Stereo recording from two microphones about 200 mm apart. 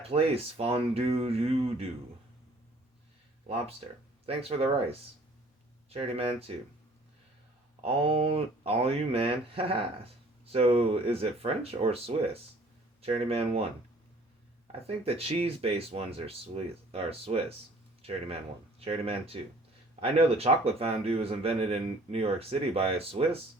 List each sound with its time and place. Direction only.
0.1 s speech: 30° right (ahead or behind)
4.3 s speech: 30° right (ahead or behind)
7.8 s speech: 30° right (ahead or behind)
14.8 s speech: 30° right (ahead or behind)
18.9 s speech: 30° right (ahead or behind)